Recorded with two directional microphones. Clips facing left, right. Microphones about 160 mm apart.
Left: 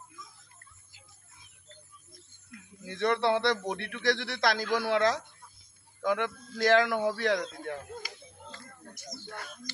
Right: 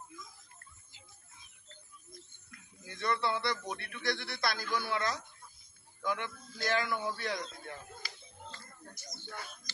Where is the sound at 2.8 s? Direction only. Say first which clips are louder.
Left 6 dB; 70° left (ahead or behind); by 5.2 s 90° left.